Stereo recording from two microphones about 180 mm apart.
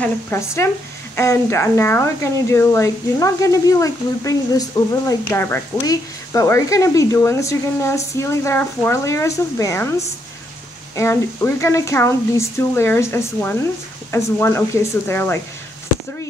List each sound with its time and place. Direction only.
0.0 s speech: 10° left (ahead or behind)